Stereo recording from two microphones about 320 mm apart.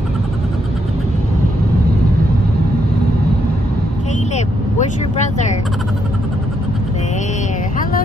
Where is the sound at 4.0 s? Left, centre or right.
Left.